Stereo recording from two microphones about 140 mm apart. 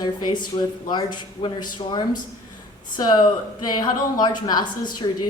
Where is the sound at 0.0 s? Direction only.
30° left (ahead or behind).